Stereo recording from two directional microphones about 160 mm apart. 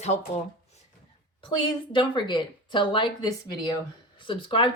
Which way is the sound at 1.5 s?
30° left (ahead or behind).